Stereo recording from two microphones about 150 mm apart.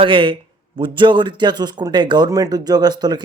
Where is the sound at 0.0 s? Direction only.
35° right (ahead or behind).